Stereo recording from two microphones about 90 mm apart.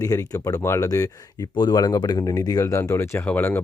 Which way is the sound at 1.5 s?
50° left (ahead or behind).